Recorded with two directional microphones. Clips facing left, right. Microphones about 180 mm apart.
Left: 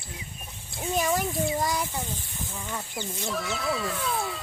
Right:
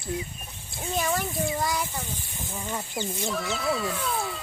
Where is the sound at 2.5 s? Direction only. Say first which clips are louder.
Right 3 dB; 20° right (ahead or behind).